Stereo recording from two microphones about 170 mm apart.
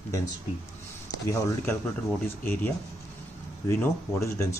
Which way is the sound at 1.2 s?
15° left (ahead or behind).